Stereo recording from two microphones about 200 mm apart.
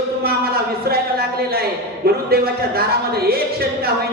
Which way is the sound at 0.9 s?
50° right (ahead or behind).